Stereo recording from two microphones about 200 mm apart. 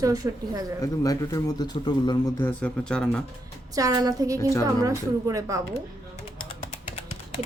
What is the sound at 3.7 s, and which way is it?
Speech, 15° right (ahead or behind).